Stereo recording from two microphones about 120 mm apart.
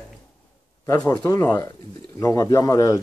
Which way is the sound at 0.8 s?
25° left (ahead or behind).